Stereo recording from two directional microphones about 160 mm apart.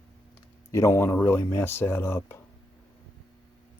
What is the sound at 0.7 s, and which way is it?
Speech, 15° left (ahead or behind).